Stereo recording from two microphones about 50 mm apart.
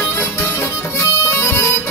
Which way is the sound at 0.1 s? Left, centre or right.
Left.